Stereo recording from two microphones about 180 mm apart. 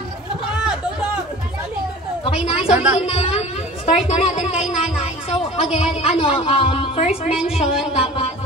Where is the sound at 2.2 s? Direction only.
35° left (ahead or behind).